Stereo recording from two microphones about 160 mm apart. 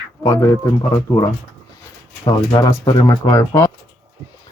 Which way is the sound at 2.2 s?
25° left (ahead or behind).